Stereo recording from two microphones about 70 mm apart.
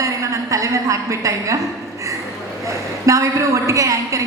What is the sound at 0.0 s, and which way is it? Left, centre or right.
A woman's voice, right.